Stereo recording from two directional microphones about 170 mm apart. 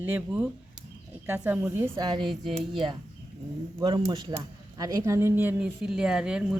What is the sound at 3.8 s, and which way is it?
Speech, 25° right (ahead or behind).